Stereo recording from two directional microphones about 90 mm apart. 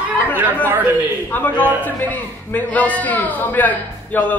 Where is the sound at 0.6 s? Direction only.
20° right (ahead or behind).